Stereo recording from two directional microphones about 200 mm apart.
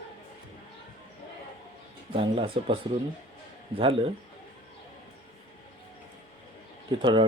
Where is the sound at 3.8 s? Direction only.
25° right (ahead or behind).